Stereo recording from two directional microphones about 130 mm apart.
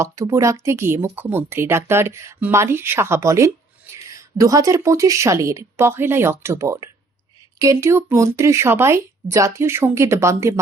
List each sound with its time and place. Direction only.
0.0 s speech: 25° right (ahead or behind)